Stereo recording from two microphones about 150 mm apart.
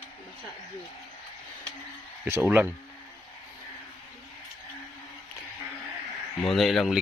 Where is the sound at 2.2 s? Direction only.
15° right (ahead or behind).